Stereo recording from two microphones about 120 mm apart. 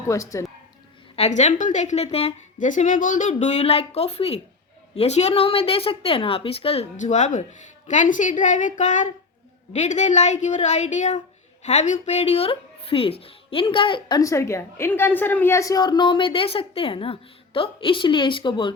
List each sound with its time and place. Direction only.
0.0 s speech: 25° left (ahead or behind)
1.1 s a woman's voice: 65° left (ahead or behind); by 3.3 s 90° left
3.4 s a woman's voice: 65° left (ahead or behind)
6.9 s a woman's voice: 90° left
9.7 s a woman's voice: 75° left (ahead or behind); by 14.2 s 45° left (ahead or behind)
14.2 s a woman's voice: 25° left (ahead or behind); by 18.7 s 45° left (ahead or behind)